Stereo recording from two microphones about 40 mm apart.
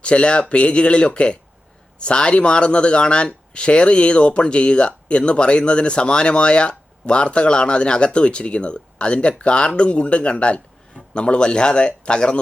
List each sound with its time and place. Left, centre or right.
0.0 s speech: left